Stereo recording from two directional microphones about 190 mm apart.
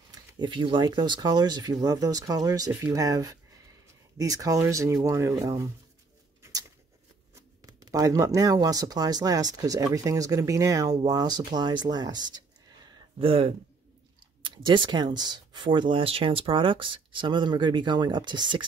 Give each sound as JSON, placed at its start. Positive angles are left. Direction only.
{"t": 0.1, "sound": "speech", "side_deg": -20}
{"t": 7.3, "sound": "speech", "side_deg": -20}